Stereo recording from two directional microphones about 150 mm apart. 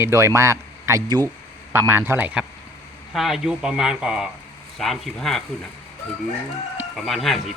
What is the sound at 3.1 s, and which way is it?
Speech, centre (ahead or behind).